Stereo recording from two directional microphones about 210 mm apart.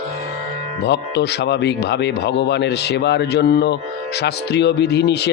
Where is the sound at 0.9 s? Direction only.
55° left (ahead or behind).